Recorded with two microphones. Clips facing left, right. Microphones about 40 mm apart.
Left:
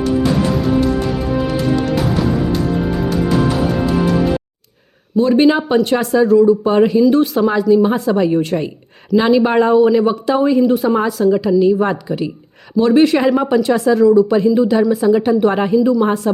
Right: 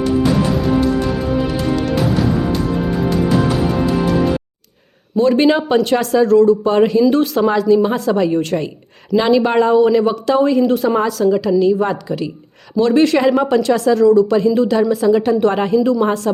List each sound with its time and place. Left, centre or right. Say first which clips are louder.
0.0 s music: even; centre
5.1 s speech: left 1 dB; centre
11.3 s speech: left 1 dB; centre